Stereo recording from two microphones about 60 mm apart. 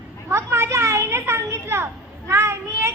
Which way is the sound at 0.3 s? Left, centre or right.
Right.